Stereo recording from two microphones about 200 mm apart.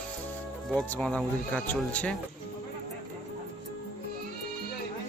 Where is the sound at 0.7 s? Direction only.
5° left (ahead or behind).